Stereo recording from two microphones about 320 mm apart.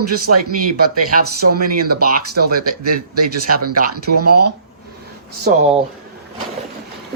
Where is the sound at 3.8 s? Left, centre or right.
Right.